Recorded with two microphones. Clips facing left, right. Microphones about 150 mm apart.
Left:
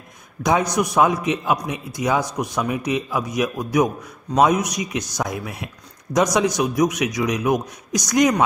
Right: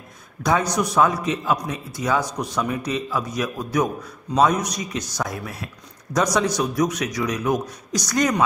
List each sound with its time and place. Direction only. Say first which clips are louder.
0.4 s a man's voice: left 2 dB; 15° left (ahead or behind)